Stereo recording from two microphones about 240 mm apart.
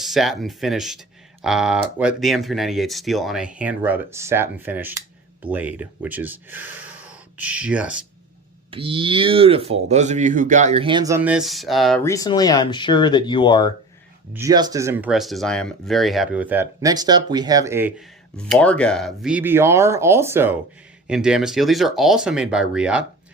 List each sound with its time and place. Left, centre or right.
0.0 s speech: centre
8.7 s speech: right; by 13.7 s centre
14.3 s speech: centre
18.3 s speech: centre